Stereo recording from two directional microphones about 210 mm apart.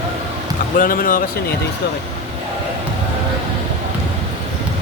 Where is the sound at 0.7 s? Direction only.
40° left (ahead or behind).